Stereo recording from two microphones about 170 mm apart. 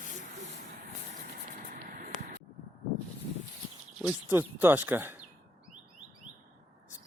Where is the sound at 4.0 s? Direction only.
10° right (ahead or behind).